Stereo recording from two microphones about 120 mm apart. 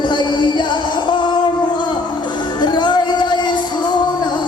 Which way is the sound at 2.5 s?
35° left (ahead or behind).